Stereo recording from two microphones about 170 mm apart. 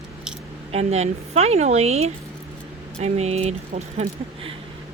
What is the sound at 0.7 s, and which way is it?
Speech, 40° right (ahead or behind).